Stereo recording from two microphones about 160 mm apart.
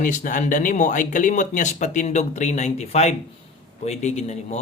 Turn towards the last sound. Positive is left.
turn(degrees=45)  # may be behind; listen again after turning